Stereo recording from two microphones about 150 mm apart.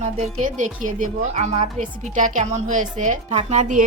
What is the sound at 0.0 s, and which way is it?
A woman's voice, 50° right (ahead or behind).